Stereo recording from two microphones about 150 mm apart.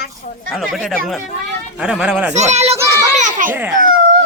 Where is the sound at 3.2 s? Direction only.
60° right (ahead or behind).